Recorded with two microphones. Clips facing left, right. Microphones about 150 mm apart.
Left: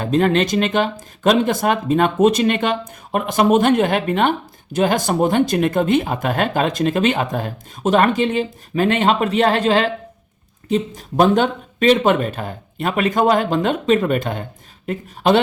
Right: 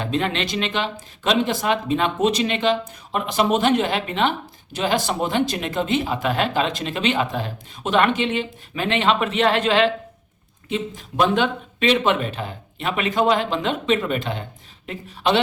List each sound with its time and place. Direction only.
0.0 s speech: 45° left (ahead or behind)